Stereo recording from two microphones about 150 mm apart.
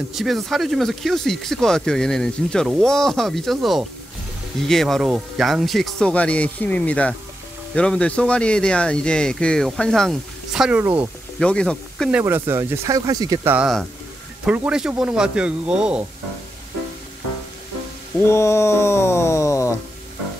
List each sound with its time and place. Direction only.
0.1 s speech: centre (ahead or behind)
11.3 s speech: 5° left (ahead or behind)
12.1 s speech: 10° right (ahead or behind)
13.6 s speech: centre (ahead or behind)
18.2 s speech: 20° left (ahead or behind)